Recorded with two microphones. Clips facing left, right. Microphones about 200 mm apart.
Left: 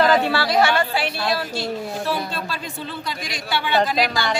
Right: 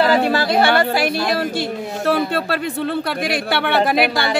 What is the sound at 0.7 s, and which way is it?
A man's voice, 65° right (ahead or behind).